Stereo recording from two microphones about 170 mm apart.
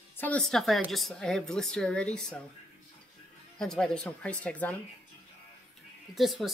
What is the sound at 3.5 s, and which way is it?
Speech, 5° left (ahead or behind).